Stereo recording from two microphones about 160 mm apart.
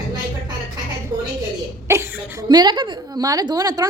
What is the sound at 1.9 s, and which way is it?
Chuckle, 15° right (ahead or behind).